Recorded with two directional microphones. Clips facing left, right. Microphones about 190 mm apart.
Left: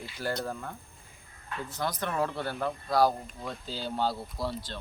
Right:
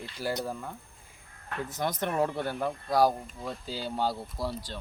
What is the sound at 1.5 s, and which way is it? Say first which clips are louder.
Speech: right 2 dB; 50° right (ahead or behind).